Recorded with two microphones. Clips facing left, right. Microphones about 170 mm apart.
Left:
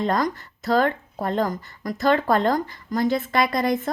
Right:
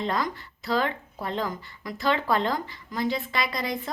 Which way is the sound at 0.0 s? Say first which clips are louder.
Left 5 dB; 45° left (ahead or behind).